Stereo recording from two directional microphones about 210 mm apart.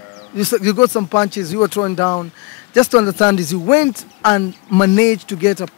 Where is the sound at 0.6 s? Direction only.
15° left (ahead or behind).